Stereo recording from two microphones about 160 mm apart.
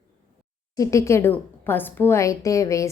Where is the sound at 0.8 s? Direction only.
20° left (ahead or behind).